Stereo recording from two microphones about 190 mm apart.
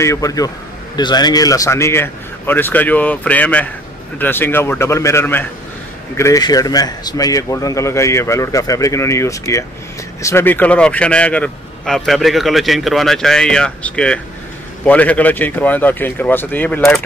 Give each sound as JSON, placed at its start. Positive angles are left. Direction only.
{"t": 0.0, "sound": "a man's voice", "side_deg": 15}